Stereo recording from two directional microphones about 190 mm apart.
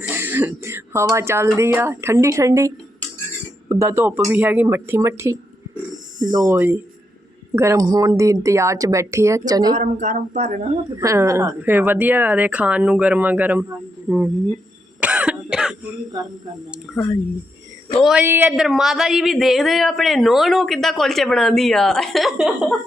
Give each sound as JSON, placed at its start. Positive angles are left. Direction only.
{"t": 0.0, "sound": "throat clearing", "side_deg": -10}
{"t": 1.1, "sound": "a woman's voice", "side_deg": -15}
{"t": 9.7, "sound": "a sound", "side_deg": -40}
{"t": 10.9, "sound": "a woman's voice", "side_deg": -15}
{"t": 15.0, "sound": "cough", "side_deg": -5}
{"t": 18.0, "sound": "speech", "side_deg": -5}